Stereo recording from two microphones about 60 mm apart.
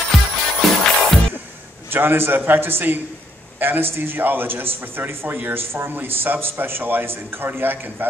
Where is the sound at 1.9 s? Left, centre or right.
Right.